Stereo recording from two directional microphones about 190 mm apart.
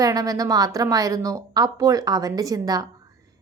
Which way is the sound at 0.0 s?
20° right (ahead or behind).